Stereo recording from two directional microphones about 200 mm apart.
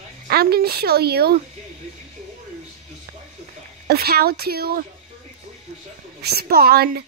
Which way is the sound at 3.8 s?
50° right (ahead or behind).